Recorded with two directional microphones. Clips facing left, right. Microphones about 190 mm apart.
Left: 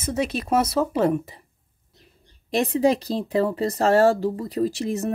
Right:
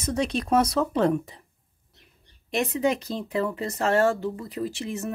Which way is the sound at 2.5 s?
35° left (ahead or behind).